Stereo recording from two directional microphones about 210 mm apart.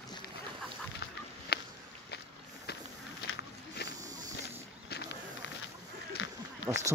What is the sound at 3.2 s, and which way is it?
Walk, 55° left (ahead or behind).